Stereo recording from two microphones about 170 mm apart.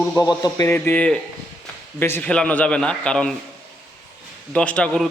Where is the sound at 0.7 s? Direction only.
10° left (ahead or behind).